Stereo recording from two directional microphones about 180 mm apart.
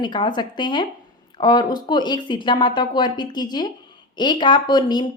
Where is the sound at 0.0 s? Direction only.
25° left (ahead or behind).